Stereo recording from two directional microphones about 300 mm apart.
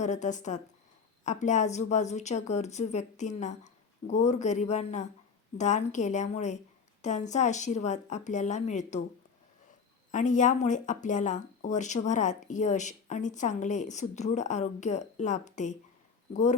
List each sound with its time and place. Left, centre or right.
0.0 s speech: left
10.1 s speech: left